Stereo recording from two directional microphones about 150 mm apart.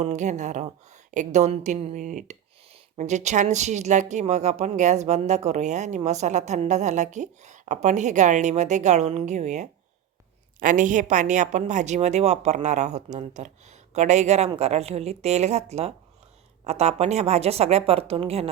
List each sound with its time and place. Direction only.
0.0 s speech: 50° right (ahead or behind)